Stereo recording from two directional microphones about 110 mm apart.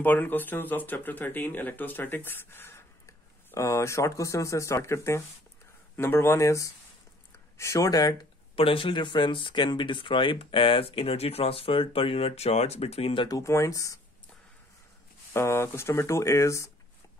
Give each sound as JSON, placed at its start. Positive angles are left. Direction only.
{"t": 0.0, "sound": "speech", "side_deg": 15}
{"t": 8.5, "sound": "speech", "side_deg": 55}
{"t": 13.3, "sound": "speech", "side_deg": 25}
{"t": 15.3, "sound": "speech", "side_deg": 25}